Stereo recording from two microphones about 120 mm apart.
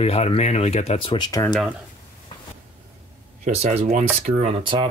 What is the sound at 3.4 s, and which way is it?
Speech, 75° right (ahead or behind).